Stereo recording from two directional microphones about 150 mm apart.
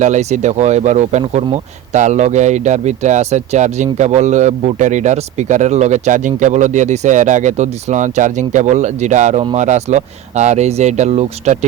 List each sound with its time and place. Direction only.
0.0 s speech: 50° right (ahead or behind)